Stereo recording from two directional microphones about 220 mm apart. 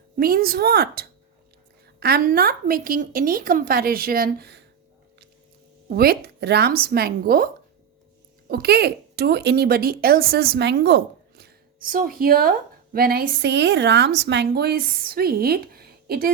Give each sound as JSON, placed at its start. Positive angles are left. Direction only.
{"t": 0.2, "sound": "a woman's voice", "side_deg": -45}
{"t": 5.9, "sound": "speech", "side_deg": -45}